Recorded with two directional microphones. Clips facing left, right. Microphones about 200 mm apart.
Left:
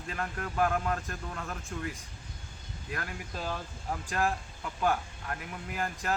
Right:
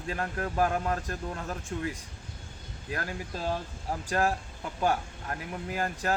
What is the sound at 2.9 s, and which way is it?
Speech, 35° right (ahead or behind).